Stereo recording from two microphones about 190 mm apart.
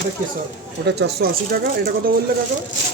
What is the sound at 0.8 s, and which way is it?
Speech, 60° right (ahead or behind).